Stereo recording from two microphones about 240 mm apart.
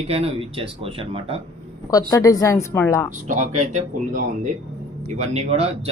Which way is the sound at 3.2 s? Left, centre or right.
Right.